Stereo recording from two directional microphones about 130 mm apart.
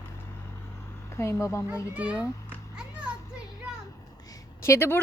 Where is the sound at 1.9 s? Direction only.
10° right (ahead or behind).